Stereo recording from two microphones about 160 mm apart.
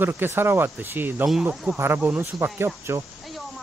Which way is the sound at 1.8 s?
15° right (ahead or behind).